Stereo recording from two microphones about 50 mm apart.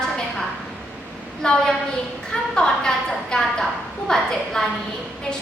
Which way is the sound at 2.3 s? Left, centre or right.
Centre.